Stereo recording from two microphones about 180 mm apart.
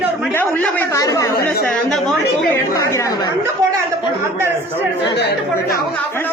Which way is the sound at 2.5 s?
15° left (ahead or behind).